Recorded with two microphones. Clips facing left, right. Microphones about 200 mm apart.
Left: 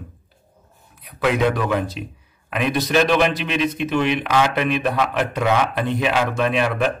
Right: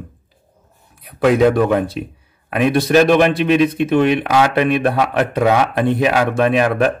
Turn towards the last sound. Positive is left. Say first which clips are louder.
# right 5 dB
turn(degrees=-50)  # may be behind; listen again after turning